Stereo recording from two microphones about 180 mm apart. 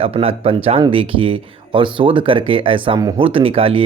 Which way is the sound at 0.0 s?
30° right (ahead or behind).